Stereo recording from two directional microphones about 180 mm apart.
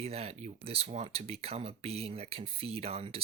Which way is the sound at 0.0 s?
35° right (ahead or behind).